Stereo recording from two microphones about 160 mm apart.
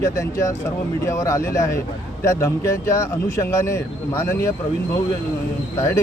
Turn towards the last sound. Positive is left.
turn(degrees=15)  # may be behind; listen again after turning